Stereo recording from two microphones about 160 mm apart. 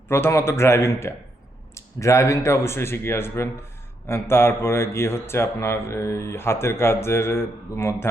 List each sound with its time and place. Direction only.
0.1 s speech: 15° left (ahead or behind)